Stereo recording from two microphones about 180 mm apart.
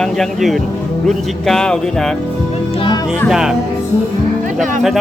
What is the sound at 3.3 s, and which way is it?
Speech, 5° right (ahead or behind).